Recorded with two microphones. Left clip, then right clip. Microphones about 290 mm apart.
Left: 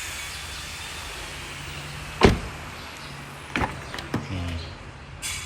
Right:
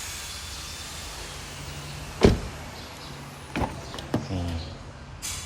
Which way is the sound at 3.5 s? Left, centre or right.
Centre.